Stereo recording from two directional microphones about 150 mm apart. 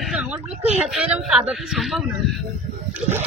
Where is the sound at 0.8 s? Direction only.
5° right (ahead or behind).